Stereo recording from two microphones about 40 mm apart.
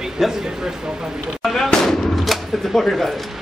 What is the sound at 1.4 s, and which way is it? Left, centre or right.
Fireworks, centre.